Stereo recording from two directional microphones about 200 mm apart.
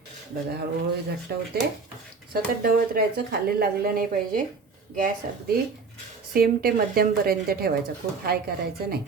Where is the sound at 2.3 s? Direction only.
45° right (ahead or behind).